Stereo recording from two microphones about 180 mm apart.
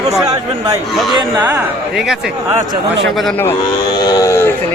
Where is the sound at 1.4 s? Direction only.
10° right (ahead or behind).